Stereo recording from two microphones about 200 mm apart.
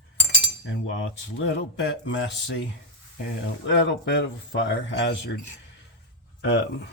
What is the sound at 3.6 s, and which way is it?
Speech, 65° left (ahead or behind).